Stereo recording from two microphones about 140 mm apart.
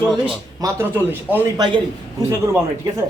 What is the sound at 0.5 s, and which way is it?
A man's voice, 20° right (ahead or behind).